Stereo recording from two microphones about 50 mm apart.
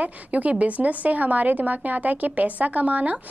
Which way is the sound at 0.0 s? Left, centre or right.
Right.